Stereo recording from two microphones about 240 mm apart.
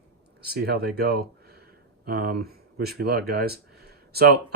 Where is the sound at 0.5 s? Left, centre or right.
Right.